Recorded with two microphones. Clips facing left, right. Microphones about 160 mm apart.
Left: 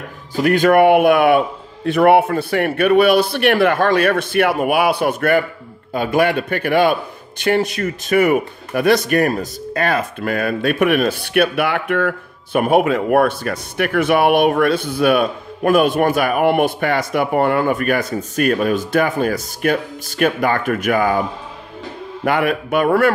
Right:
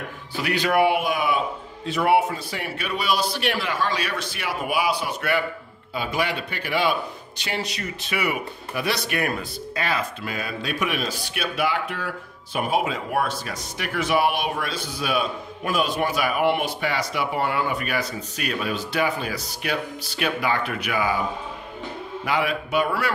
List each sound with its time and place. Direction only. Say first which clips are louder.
0.4 s a man's voice: left 9 dB; 50° left (ahead or behind)
22.2 s a man's voice: left 7 dB; 55° left (ahead or behind)